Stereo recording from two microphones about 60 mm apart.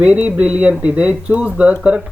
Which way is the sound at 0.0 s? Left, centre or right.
Right.